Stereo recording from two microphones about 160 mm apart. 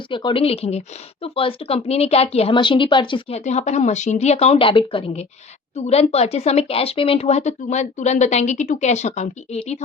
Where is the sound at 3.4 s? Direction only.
45° left (ahead or behind).